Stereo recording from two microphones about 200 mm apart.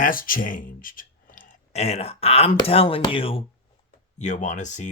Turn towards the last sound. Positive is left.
turn(degrees=35)  # may be behind; listen again after turning